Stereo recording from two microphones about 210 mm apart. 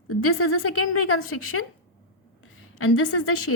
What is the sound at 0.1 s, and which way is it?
A woman's voice, 90° left.